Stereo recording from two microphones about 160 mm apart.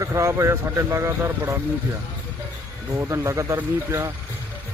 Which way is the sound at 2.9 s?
15° right (ahead or behind).